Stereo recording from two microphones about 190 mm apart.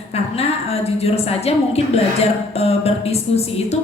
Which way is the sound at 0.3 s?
30° left (ahead or behind).